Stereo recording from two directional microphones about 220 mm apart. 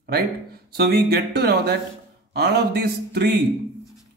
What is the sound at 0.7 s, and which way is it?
A man's voice, 45° right (ahead or behind).